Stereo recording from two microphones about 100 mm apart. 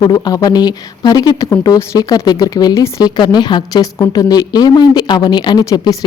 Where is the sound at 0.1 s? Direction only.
35° left (ahead or behind).